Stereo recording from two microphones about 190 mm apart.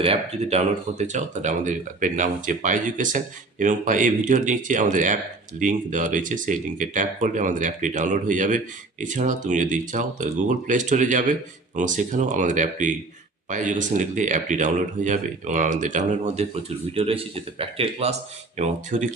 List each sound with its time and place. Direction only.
0.0 s speech: 35° right (ahead or behind)